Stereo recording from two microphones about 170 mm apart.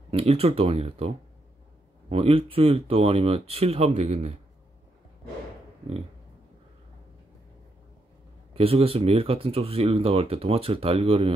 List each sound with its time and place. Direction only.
0.1 s speech: 35° right (ahead or behind)
8.5 s speech: 35° right (ahead or behind)